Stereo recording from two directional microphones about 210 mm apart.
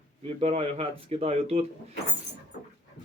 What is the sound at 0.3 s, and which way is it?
Speech, 30° right (ahead or behind).